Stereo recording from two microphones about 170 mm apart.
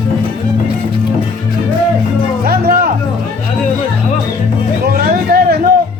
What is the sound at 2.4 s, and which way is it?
Music, 60° right (ahead or behind).